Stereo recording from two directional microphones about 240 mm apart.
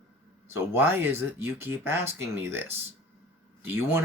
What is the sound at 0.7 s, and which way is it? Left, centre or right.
Speech, centre.